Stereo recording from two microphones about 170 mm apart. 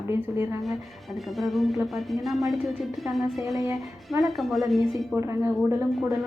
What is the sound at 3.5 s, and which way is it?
Speech, 20° right (ahead or behind).